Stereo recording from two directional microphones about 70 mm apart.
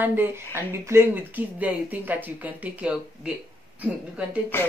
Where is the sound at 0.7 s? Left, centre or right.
Right.